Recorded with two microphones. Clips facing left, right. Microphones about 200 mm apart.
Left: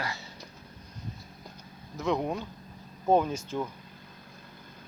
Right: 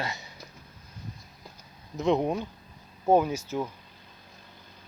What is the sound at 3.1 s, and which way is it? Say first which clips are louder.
Speech: right 2 dB; 10° right (ahead or behind).